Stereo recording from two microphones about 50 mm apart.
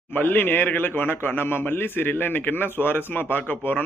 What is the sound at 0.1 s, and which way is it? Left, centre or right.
A man's voice, left.